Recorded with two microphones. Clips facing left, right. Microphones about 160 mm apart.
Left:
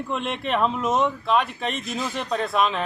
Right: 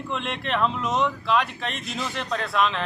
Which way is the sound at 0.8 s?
45° left (ahead or behind).